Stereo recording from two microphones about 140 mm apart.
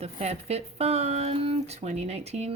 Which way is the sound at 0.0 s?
50° right (ahead or behind).